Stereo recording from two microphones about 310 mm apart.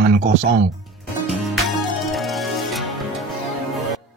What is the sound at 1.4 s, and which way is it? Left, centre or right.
Music, centre.